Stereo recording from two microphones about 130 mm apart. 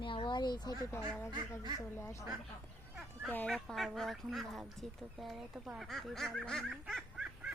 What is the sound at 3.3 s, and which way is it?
Speech, 10° left (ahead or behind).